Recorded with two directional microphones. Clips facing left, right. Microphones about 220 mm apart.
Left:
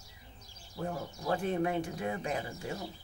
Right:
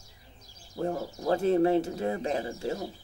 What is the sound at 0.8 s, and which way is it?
Speech, 35° right (ahead or behind).